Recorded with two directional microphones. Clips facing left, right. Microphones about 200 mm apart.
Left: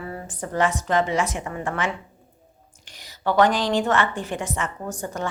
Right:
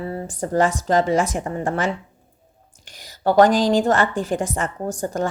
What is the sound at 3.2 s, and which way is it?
A woman's voice, 40° right (ahead or behind).